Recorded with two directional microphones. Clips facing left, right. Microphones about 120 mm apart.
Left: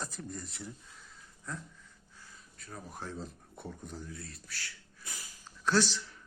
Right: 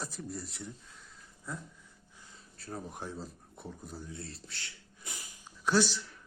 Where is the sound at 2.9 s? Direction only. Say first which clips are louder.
Right 1 dB; 15° right (ahead or behind).